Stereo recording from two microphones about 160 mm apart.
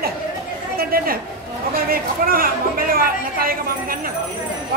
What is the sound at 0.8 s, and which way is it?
A man's voice, 65° right (ahead or behind).